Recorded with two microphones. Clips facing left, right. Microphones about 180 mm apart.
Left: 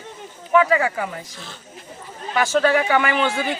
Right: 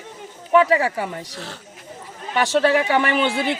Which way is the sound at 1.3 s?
75° right (ahead or behind).